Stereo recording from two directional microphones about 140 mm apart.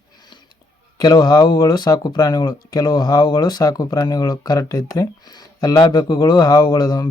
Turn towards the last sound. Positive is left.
turn(degrees=30)  # may be behind; listen again after turning